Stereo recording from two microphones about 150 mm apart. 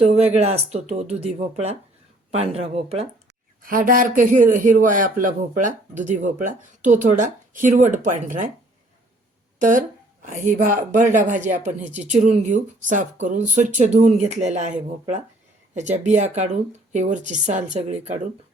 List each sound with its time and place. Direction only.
0.3 s speech: 45° right (ahead or behind)
3.6 s speech: 65° right (ahead or behind)
9.6 s speech: 60° right (ahead or behind); by 18.2 s 45° right (ahead or behind)